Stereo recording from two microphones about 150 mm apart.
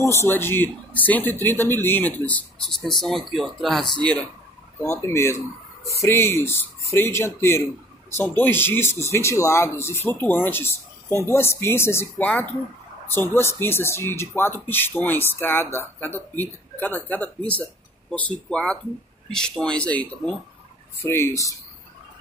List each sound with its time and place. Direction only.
0.0 s speech: 20° left (ahead or behind)
4.8 s speech: 15° left (ahead or behind)